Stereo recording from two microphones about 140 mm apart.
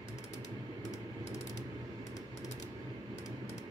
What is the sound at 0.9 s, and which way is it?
Mechanisms, 20° left (ahead or behind).